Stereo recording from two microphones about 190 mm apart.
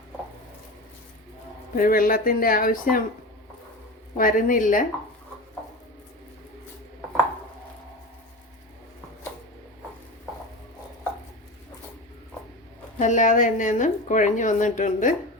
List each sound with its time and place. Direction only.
1.7 s speech: 50° left (ahead or behind)
4.2 s speech: 45° left (ahead or behind)
13.0 s a woman's voice: 40° left (ahead or behind)